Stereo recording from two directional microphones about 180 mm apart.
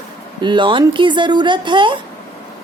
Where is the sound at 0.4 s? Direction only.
25° right (ahead or behind).